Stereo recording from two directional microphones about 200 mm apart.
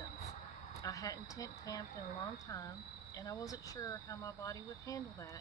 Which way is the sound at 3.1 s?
15° left (ahead or behind).